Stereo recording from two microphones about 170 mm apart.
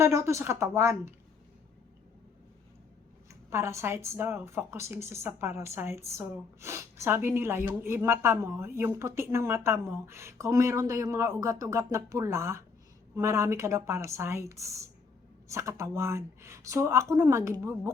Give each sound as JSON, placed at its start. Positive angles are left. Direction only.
{"t": 0.0, "sound": "speech", "side_deg": -15}
{"t": 3.2, "sound": "speech", "side_deg": -15}